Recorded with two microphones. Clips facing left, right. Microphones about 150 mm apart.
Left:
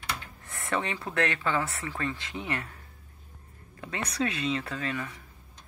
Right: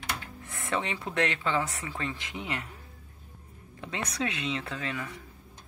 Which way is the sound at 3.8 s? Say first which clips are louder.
Left 2 dB; 20° right (ahead or behind).